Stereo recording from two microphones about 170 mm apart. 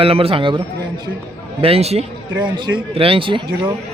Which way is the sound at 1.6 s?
35° right (ahead or behind).